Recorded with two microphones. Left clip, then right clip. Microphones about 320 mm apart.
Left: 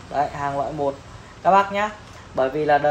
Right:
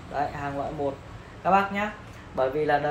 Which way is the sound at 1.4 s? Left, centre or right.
Left.